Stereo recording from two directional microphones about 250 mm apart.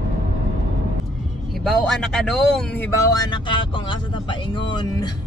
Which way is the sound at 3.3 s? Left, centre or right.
Centre.